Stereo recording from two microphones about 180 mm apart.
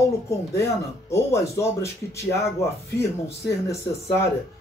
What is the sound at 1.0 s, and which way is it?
Speech, 15° left (ahead or behind).